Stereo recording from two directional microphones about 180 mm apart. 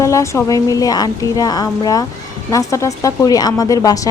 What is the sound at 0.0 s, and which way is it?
Speech, 15° left (ahead or behind).